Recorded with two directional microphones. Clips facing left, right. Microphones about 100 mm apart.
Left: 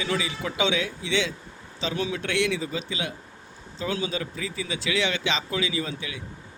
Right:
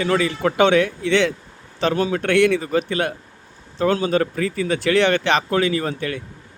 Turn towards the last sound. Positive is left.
turn(degrees=-55)  # may be behind; listen again after turning